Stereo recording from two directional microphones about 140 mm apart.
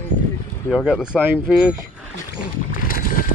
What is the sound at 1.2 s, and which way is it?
Speech, 5° right (ahead or behind).